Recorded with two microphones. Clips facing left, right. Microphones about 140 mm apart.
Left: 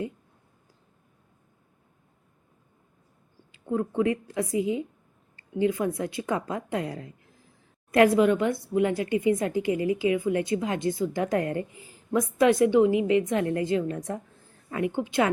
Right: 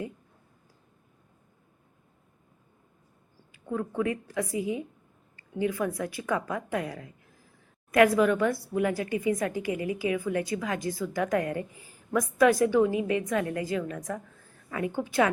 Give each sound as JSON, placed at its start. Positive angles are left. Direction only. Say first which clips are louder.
{"t": 3.5, "sound": "a woman's voice", "louder": "left 4 dB", "side_deg": 25}